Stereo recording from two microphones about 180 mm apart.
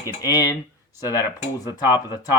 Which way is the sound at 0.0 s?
20° left (ahead or behind).